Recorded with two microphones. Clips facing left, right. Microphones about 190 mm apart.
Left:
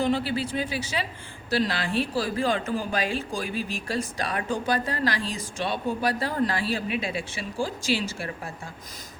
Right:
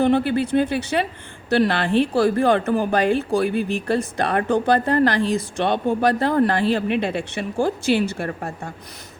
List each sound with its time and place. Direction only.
0.0 s a woman's voice: 60° right (ahead or behind)